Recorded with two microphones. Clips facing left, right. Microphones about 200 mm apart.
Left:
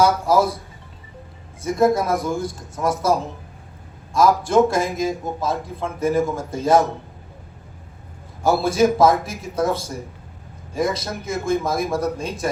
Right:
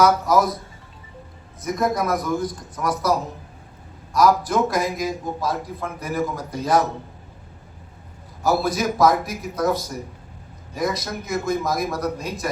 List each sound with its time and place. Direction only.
0.0 s a man's voice: 30° left (ahead or behind)
1.6 s a man's voice: 30° left (ahead or behind)
8.4 s a man's voice: 25° left (ahead or behind)